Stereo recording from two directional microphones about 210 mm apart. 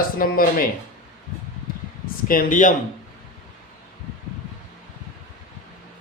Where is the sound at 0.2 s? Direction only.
45° left (ahead or behind).